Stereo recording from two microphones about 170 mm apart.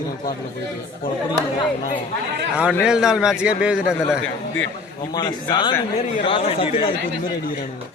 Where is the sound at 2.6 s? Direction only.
5° right (ahead or behind).